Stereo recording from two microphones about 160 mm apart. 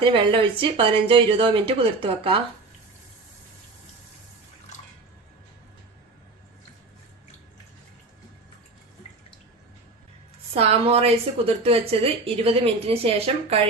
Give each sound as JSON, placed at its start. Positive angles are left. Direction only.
{"t": 0.0, "sound": "speech", "side_deg": -30}
{"t": 10.5, "sound": "speech", "side_deg": -40}